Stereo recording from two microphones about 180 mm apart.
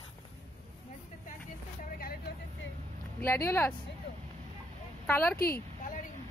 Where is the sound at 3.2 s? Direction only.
15° left (ahead or behind).